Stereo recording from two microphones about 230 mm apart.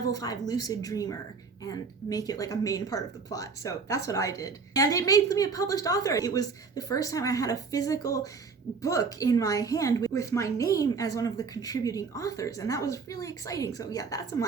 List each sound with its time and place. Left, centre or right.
0.1 s speech: centre